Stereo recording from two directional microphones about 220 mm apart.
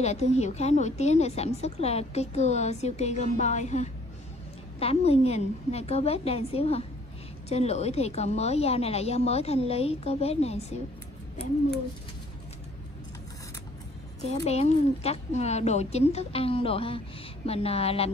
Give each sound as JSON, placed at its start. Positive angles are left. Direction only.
{"t": 0.0, "sound": "a woman's voice", "side_deg": 30}
{"t": 14.2, "sound": "a woman's voice", "side_deg": 30}